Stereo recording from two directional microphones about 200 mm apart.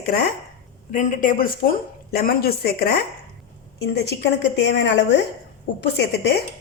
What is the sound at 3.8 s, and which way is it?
A woman's voice, 60° left (ahead or behind).